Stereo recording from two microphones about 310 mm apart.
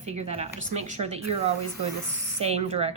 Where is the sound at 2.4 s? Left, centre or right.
Right.